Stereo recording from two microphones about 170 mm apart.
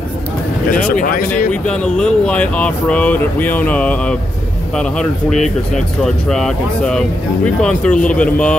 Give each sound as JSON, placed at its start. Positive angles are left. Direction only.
{"t": 0.9, "sound": "speech", "side_deg": 55}
{"t": 1.5, "sound": "speech", "side_deg": 5}
{"t": 6.2, "sound": "speech", "side_deg": 5}